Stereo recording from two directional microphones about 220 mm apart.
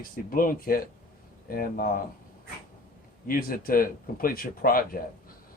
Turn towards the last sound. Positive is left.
turn(degrees=40)  # may be behind; listen again after turning